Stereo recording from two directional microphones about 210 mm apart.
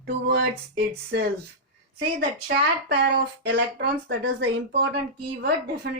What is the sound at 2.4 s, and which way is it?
Speech, 50° right (ahead or behind).